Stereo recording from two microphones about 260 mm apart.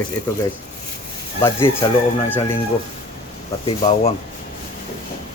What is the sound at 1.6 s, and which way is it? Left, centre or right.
Speech, centre.